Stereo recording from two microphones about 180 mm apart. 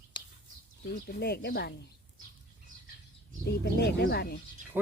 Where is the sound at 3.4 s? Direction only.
60° left (ahead or behind).